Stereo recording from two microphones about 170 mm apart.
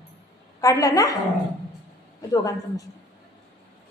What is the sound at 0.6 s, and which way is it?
Speech, 20° left (ahead or behind).